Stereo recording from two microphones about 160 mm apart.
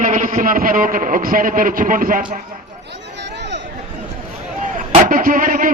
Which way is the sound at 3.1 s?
90° right.